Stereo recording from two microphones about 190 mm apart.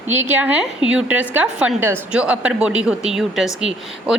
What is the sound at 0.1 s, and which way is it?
A woman's voice, 10° right (ahead or behind).